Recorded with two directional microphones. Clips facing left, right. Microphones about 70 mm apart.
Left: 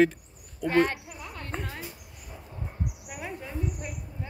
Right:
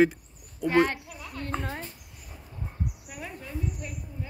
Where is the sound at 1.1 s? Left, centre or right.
Centre.